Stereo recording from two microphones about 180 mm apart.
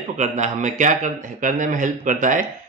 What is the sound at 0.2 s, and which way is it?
A man's voice, 45° right (ahead or behind).